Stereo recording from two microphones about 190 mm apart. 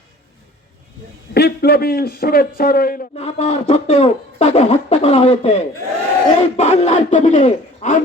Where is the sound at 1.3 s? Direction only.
60° left (ahead or behind).